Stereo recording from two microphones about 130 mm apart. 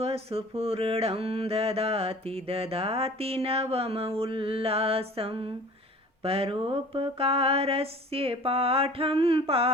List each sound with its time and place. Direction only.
0.0 s mantra: 50° right (ahead or behind)